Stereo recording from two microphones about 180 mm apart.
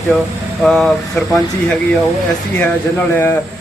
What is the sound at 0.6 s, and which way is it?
Speech, centre (ahead or behind).